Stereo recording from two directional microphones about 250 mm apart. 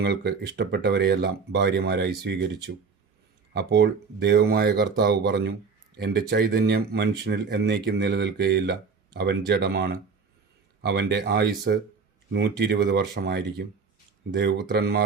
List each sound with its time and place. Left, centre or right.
0.0 s speech: right